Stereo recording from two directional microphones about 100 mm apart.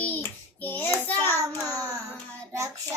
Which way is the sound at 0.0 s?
20° left (ahead or behind).